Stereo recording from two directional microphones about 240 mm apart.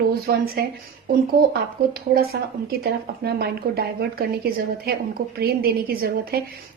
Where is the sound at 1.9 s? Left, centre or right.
Right.